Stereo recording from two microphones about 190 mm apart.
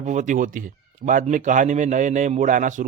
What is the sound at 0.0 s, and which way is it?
Speech, 40° right (ahead or behind).